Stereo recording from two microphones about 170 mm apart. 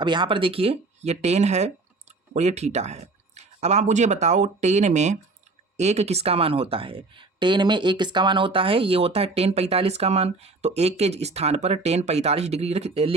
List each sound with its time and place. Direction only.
0.0 s speech: 25° right (ahead or behind)